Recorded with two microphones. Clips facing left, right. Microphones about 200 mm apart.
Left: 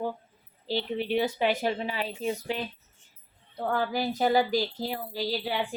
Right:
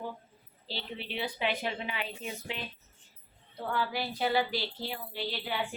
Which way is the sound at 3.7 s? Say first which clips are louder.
Left 5 dB; 45° left (ahead or behind).